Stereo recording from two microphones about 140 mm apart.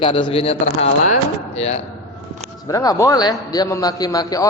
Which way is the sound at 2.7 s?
25° left (ahead or behind).